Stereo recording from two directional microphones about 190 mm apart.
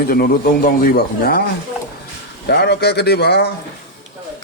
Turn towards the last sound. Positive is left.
turn(degrees=60)  # may be behind; listen again after turning